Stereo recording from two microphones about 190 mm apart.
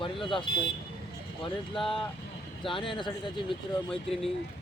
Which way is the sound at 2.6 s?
25° left (ahead or behind).